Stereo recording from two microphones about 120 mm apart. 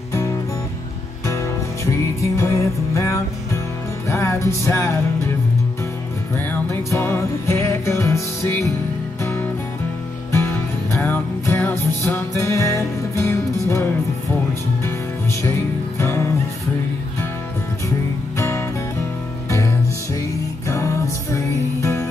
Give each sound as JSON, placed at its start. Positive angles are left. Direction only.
{"t": 1.2, "sound": "music", "side_deg": 25}
{"t": 6.3, "sound": "music", "side_deg": 20}
{"t": 10.3, "sound": "music", "side_deg": 20}
{"t": 16.0, "sound": "music", "side_deg": 20}
{"t": 18.4, "sound": "music", "side_deg": 20}
{"t": 20.6, "sound": "music", "side_deg": 25}